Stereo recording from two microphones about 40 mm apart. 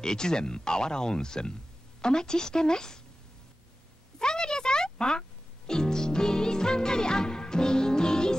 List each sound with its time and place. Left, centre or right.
0.0 s speech: centre
4.2 s a sound: centre
5.7 s music: centre